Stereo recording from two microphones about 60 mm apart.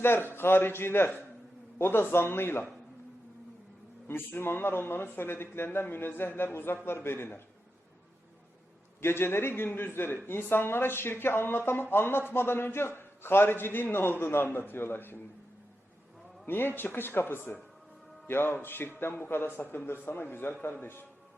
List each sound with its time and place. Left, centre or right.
0.0 s a man's voice: left
4.1 s a man's voice: left
9.0 s a man's voice: left
16.5 s a man's voice: left